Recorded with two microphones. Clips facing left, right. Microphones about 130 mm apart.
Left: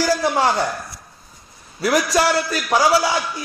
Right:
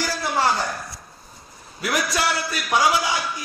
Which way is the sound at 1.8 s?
35° left (ahead or behind).